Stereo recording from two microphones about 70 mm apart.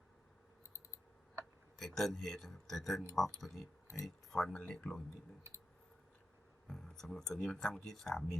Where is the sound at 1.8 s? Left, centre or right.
Centre.